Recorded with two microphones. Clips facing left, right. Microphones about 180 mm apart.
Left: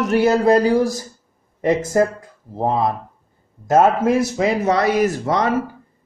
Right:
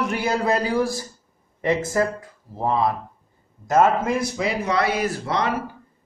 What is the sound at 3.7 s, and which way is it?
Speech, 60° left (ahead or behind).